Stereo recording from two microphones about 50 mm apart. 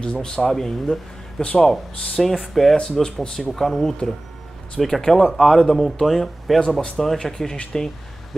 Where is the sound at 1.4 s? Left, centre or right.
Left.